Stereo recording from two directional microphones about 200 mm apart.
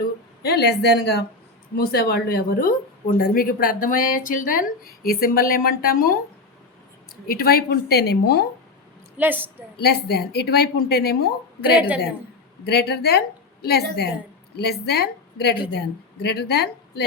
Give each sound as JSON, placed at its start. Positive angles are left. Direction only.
{"t": 0.0, "sound": "a woman's voice", "side_deg": 55}
{"t": 7.3, "sound": "a woman's voice", "side_deg": 50}
{"t": 9.1, "sound": "a woman's voice", "side_deg": -10}
{"t": 9.8, "sound": "a woman's voice", "side_deg": 55}
{"t": 12.6, "sound": "a woman's voice", "side_deg": 55}